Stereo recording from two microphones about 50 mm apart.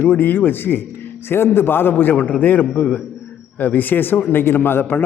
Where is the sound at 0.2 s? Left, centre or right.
Left.